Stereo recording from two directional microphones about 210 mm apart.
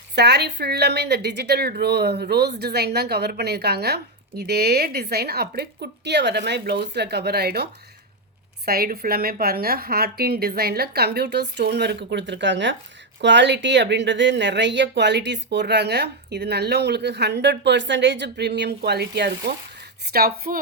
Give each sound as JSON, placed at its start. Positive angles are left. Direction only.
{"t": 0.2, "sound": "a woman's voice", "side_deg": -50}